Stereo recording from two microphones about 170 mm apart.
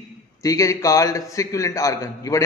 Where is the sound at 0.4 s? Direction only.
20° left (ahead or behind).